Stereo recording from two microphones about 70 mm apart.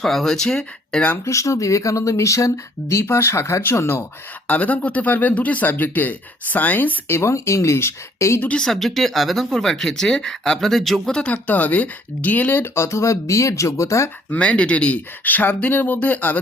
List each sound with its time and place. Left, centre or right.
0.0 s speech: centre
1.2 s speech: left
4.4 s speech: left
7.1 s speech: left
8.5 s speech: centre
11.2 s speech: left
14.3 s speech: centre